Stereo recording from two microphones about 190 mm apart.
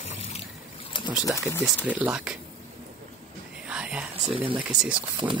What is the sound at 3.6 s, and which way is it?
Whispering, 5° right (ahead or behind).